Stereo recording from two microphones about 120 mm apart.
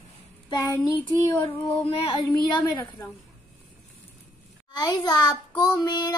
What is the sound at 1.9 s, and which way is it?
Child singing, 45° left (ahead or behind).